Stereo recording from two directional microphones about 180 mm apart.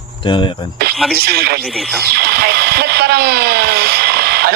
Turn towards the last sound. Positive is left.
turn(degrees=-60)  # may be behind; listen again after turning